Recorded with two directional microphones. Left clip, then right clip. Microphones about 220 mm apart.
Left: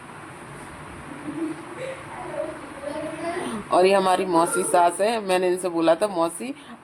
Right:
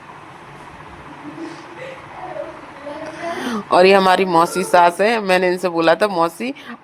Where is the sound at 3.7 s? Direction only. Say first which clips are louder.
Right 7 dB; 20° right (ahead or behind).